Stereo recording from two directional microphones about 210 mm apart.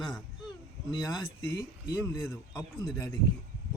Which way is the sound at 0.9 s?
20° left (ahead or behind).